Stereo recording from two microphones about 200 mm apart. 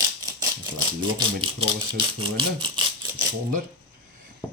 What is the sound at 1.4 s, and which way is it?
Speech, 25° right (ahead or behind).